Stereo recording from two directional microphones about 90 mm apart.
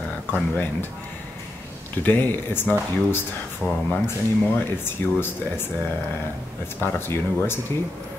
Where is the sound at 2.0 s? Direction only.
20° left (ahead or behind).